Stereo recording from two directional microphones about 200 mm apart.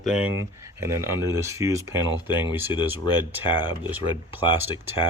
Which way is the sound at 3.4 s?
25° left (ahead or behind).